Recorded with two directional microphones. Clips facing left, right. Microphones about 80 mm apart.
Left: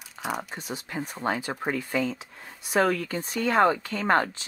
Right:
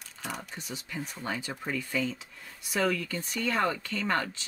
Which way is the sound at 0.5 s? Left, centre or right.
Left.